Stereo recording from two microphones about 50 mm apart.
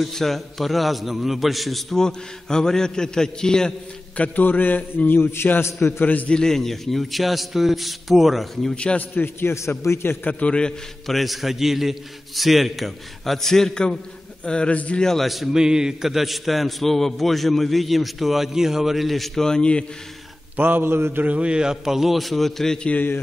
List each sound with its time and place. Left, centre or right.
0.0 s a man's voice: centre
4.2 s a man's voice: left
5.3 s a man's voice: left
6.2 s a man's voice: centre
8.7 s a man's voice: left
9.1 s a man's voice: left
10.4 s a man's voice: centre
11.1 s a man's voice: centre
15.2 s a man's voice: centre
15.5 s a man's voice: centre
20.5 s mantra: right
21.2 s a man's voice: right; by 22.8 s centre